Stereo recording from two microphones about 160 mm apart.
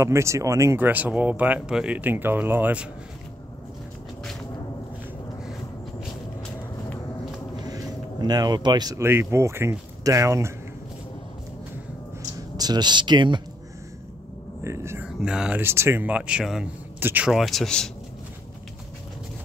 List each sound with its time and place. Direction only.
0.0 s speech: 15° right (ahead or behind)
7.6 s speech: 25° right (ahead or behind)
12.5 s speech: 25° right (ahead or behind)
14.6 s speech: 15° right (ahead or behind)
15.0 s speech: 5° right (ahead or behind)